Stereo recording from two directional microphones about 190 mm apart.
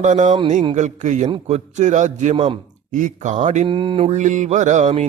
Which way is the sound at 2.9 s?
40° right (ahead or behind).